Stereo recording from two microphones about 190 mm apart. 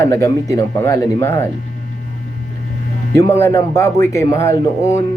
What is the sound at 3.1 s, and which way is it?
Speech, 15° left (ahead or behind).